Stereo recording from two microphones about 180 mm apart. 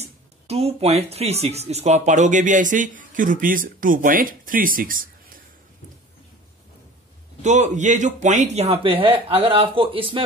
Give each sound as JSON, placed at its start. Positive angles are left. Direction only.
{"t": 0.0, "sound": "speech", "side_deg": -35}
{"t": 7.4, "sound": "speech", "side_deg": -40}